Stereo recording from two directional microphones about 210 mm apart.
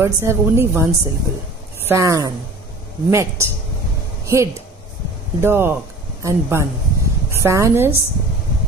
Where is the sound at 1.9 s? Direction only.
15° right (ahead or behind).